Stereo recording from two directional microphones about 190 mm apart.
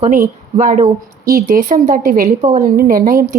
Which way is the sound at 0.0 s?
45° right (ahead or behind).